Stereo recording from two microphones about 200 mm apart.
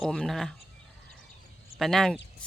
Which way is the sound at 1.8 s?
Centre (ahead or behind).